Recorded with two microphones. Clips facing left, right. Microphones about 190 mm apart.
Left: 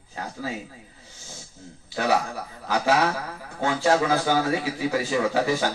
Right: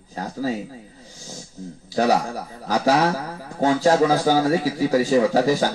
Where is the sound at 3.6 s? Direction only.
40° right (ahead or behind).